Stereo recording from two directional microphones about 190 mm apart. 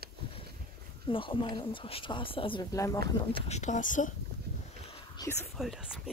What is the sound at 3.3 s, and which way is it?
Speech, 35° left (ahead or behind).